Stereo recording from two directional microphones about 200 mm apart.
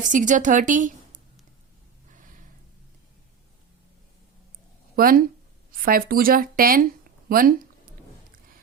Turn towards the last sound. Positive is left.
turn(degrees=-45)  # may be behind; listen again after turning